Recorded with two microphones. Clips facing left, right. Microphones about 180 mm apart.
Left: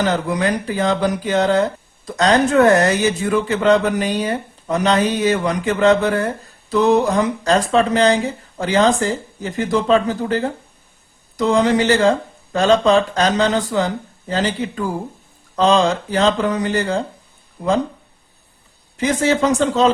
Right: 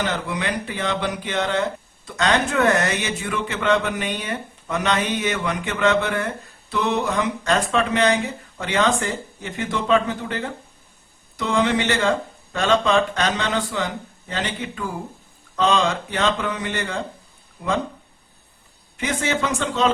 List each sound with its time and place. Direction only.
0.0 s speech: 40° left (ahead or behind)
18.9 s speech: 35° left (ahead or behind)